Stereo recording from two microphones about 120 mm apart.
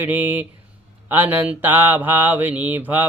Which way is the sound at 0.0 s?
15° right (ahead or behind).